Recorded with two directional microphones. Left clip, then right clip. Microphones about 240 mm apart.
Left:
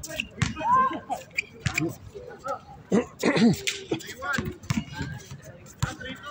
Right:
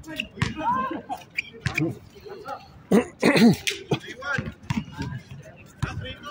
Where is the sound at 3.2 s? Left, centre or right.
Right.